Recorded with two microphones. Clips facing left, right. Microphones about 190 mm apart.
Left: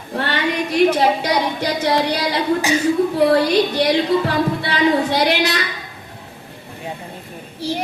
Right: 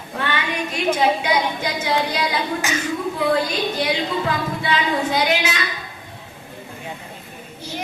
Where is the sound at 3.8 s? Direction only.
35° left (ahead or behind).